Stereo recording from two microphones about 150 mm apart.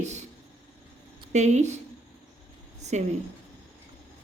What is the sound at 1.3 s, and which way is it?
Speech, 50° right (ahead or behind).